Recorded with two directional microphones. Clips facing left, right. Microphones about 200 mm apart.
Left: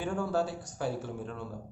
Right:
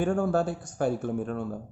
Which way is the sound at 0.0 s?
50° right (ahead or behind).